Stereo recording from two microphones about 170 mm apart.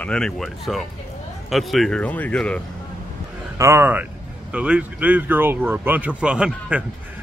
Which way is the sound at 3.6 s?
15° right (ahead or behind).